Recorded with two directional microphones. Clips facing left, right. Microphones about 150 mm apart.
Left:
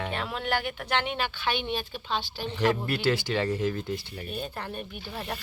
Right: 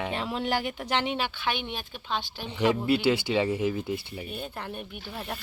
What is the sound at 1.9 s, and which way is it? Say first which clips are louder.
Speech: left 1 dB; 15° right (ahead or behind).